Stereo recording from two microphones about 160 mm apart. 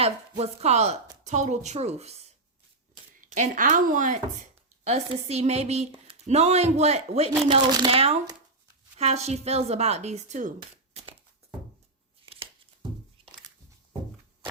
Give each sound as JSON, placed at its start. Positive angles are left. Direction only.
{"t": 0.0, "sound": "speech", "side_deg": -40}
{"t": 3.2, "sound": "a woman's voice", "side_deg": -50}
{"t": 4.8, "sound": "a woman's voice", "side_deg": -45}
{"t": 7.4, "sound": "speech", "side_deg": -25}
{"t": 7.9, "sound": "speech", "side_deg": -40}
{"t": 12.2, "sound": "a sound", "side_deg": -35}